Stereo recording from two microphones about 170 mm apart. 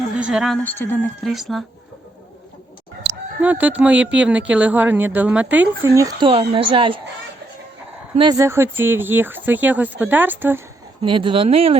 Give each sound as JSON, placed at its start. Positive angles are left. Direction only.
{"t": 0.2, "sound": "a woman's voice", "side_deg": -5}
{"t": 0.6, "sound": "speech", "side_deg": 10}
{"t": 1.2, "sound": "speech", "side_deg": 0}
{"t": 3.4, "sound": "speech", "side_deg": -10}
{"t": 8.2, "sound": "speech", "side_deg": -20}
{"t": 11.0, "sound": "speech", "side_deg": -30}